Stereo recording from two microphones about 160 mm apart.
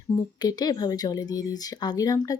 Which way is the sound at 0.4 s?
25° left (ahead or behind).